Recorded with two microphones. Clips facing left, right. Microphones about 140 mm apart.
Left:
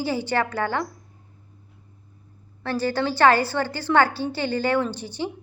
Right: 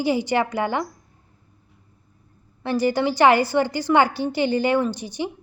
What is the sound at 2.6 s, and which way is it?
A woman's voice, 15° right (ahead or behind).